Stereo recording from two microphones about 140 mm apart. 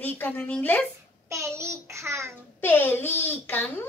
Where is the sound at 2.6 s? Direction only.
15° left (ahead or behind).